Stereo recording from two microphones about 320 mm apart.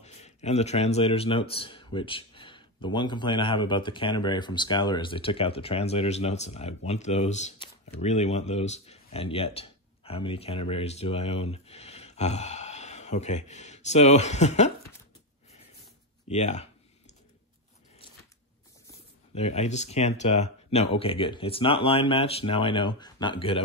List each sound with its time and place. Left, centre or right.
0.0 s a man's voice: left
16.3 s speech: left
19.3 s speech: centre